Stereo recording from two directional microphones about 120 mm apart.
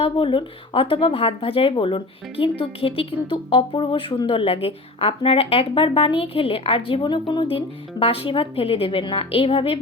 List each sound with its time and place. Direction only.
0.0 s speech: 45° left (ahead or behind)
7.5 s speech: 50° left (ahead or behind)